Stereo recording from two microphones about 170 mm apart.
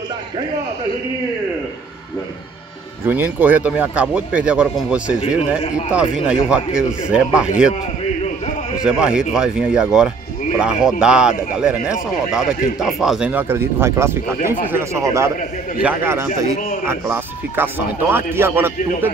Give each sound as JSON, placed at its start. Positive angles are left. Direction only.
{"t": 3.1, "sound": "speech", "side_deg": -10}
{"t": 8.7, "sound": "speech", "side_deg": -5}